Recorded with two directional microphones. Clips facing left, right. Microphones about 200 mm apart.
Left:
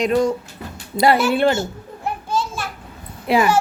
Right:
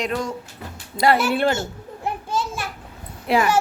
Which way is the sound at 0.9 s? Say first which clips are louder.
Left 3 dB; 40° left (ahead or behind).